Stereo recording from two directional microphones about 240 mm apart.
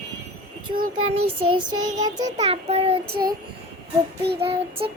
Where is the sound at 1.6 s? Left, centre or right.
Centre.